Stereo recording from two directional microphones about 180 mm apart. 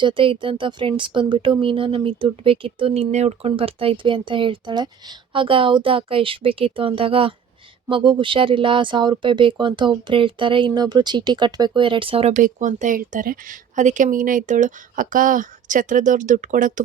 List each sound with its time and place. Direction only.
0.0 s speech: 25° right (ahead or behind)
12.4 s speech: 45° right (ahead or behind)